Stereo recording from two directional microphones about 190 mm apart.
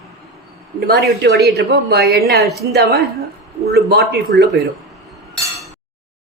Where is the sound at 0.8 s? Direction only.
55° right (ahead or behind).